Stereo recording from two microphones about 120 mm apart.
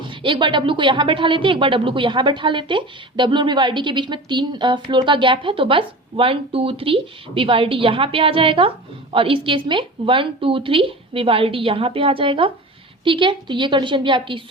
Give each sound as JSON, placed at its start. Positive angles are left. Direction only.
{"t": 0.0, "sound": "speech", "side_deg": -45}